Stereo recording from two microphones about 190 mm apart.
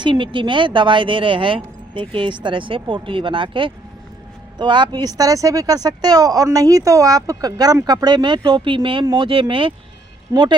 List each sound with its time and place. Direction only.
0.0 s speech: 25° right (ahead or behind)